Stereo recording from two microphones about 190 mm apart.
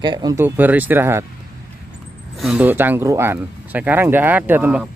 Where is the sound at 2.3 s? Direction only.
5° right (ahead or behind).